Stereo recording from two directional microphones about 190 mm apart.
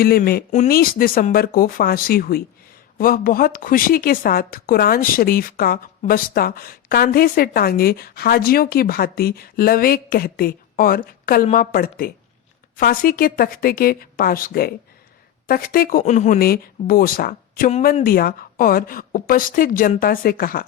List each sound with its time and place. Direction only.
0.0 s a woman's voice: 50° left (ahead or behind)